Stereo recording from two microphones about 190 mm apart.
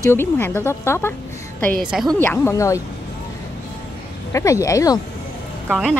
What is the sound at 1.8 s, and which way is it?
Speech, 5° right (ahead or behind).